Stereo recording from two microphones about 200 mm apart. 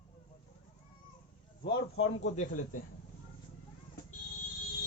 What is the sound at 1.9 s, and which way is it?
Speech, 30° left (ahead or behind).